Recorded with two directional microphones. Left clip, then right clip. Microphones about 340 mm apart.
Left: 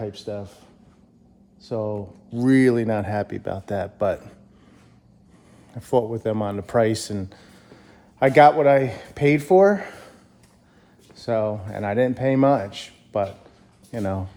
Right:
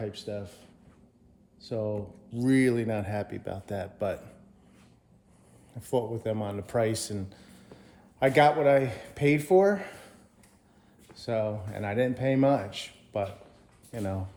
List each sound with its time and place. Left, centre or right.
0.0 s speech: centre
5.7 s speech: left